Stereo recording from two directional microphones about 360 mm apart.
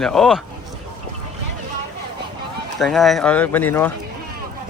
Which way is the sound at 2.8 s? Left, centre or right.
Centre.